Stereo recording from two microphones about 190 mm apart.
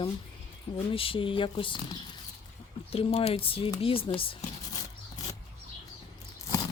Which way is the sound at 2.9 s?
30° left (ahead or behind).